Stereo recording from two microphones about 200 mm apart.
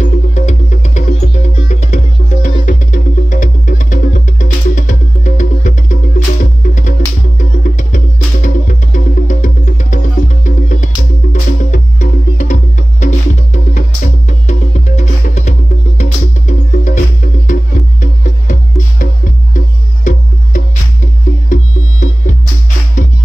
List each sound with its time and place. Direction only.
0.0 s music: 35° left (ahead or behind)